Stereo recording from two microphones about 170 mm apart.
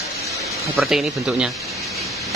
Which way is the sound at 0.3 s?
Centre (ahead or behind).